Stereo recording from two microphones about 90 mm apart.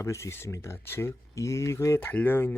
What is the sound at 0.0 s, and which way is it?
Speech, 35° left (ahead or behind).